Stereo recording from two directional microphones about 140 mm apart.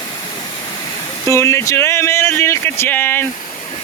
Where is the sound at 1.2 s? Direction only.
20° left (ahead or behind).